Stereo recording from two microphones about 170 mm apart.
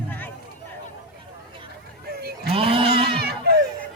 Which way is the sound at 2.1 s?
70° right (ahead or behind).